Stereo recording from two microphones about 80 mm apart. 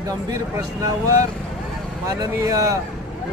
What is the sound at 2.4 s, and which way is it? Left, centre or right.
Speech, right.